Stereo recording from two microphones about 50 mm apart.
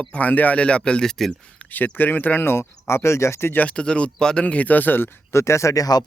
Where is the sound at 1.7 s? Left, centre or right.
Left.